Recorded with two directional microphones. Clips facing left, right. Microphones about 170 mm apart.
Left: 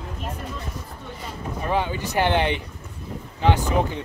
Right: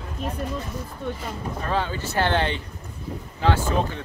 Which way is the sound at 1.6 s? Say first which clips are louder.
Left 3 dB; 15° left (ahead or behind).